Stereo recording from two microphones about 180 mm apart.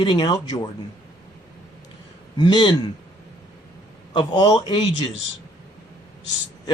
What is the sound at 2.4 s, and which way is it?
Speech, 25° left (ahead or behind).